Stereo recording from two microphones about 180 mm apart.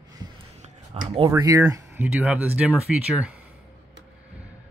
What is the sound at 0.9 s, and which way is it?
Speech, 30° right (ahead or behind).